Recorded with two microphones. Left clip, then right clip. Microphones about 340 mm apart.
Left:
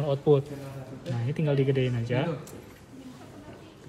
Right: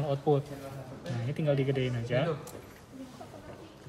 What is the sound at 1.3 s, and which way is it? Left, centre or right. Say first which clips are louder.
Speech: left 3 dB; centre.